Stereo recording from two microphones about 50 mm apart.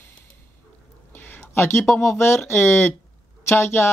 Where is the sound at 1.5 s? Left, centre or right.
Left.